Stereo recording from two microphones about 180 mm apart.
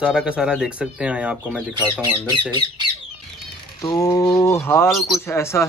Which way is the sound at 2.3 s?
25° right (ahead or behind).